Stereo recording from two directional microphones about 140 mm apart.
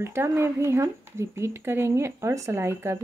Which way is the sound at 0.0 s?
20° right (ahead or behind).